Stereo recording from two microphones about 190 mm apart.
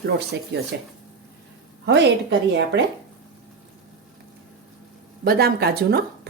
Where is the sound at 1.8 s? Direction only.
65° right (ahead or behind).